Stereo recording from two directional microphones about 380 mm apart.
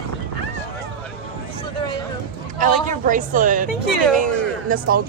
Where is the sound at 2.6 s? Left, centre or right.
Centre.